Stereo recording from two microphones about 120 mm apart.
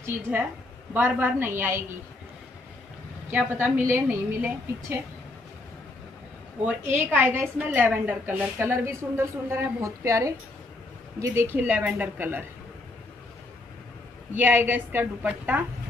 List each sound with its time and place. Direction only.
0.9 s a woman's voice: 15° right (ahead or behind)
3.3 s a woman's voice: 20° right (ahead or behind)
6.6 s a woman's voice: 15° right (ahead or behind)
14.3 s a woman's voice: 15° right (ahead or behind)